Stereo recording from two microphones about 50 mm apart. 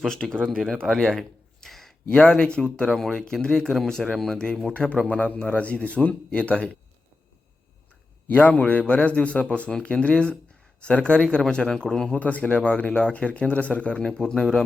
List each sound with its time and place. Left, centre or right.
0.0 s speech: centre
1.6 s a sound: centre
2.2 s speech: centre
4.9 s speech: left
8.3 s speech: left; by 12.1 s centre
12.1 s speech: left; by 14.6 s centre